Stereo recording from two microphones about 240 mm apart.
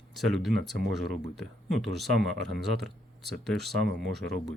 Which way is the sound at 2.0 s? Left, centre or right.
Centre.